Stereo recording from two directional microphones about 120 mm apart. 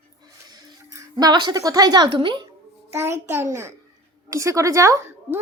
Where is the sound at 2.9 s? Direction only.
20° right (ahead or behind).